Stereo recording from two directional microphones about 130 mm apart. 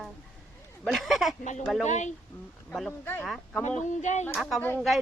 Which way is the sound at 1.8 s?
65° left (ahead or behind).